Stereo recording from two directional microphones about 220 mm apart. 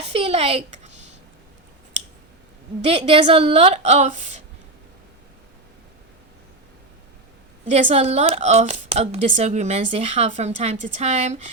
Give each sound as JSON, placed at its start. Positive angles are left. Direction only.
{"t": 0.1, "sound": "speech", "side_deg": -25}
{"t": 2.8, "sound": "a woman's voice", "side_deg": -25}
{"t": 7.7, "sound": "speech", "side_deg": -30}